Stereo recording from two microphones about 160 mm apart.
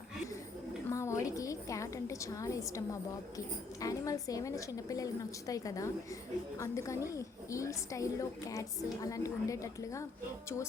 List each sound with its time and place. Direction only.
0.9 s a woman's voice: 20° left (ahead or behind)